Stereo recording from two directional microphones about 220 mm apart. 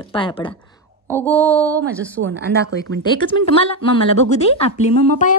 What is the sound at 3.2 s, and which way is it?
A woman's voice, 25° left (ahead or behind).